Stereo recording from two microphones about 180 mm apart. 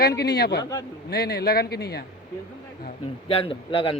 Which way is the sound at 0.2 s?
65° left (ahead or behind).